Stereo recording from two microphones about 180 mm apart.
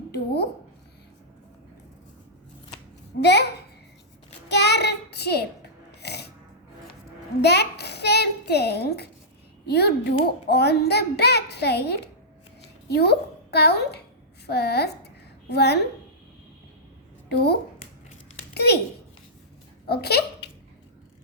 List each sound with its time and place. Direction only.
3.2 s a child's voice: 70° left (ahead or behind)
4.4 s child singing: 70° left (ahead or behind)
6.0 s music: 65° left (ahead or behind)
7.4 s a child's voice: 65° left (ahead or behind)
17.2 s a woman's voice: 65° left (ahead or behind)
19.9 s a child's voice: 60° left (ahead or behind)